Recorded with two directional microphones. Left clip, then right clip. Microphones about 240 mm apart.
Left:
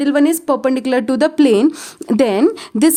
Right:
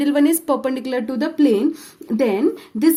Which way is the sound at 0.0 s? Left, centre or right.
Left.